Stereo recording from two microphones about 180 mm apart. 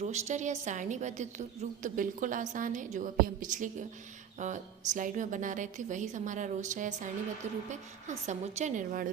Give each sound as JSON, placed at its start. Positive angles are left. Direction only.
{"t": 0.0, "sound": "a woman's voice", "side_deg": -40}